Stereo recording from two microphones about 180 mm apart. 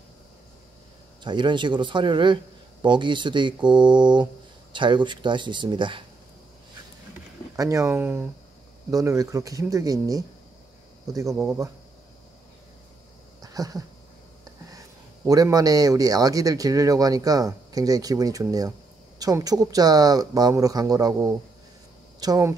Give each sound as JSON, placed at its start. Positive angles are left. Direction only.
{"t": 1.2, "sound": "a man's voice", "side_deg": -25}
{"t": 7.5, "sound": "a man's voice", "side_deg": -20}
{"t": 13.4, "sound": "a sound", "side_deg": -20}
{"t": 14.7, "sound": "a man's voice", "side_deg": -20}